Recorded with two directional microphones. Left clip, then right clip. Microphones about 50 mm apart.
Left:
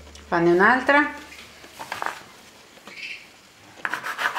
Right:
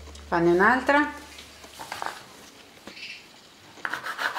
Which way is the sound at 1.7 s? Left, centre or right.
Centre.